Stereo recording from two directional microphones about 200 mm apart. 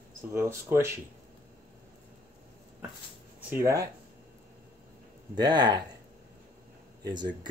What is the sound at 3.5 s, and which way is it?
Speech, 15° right (ahead or behind).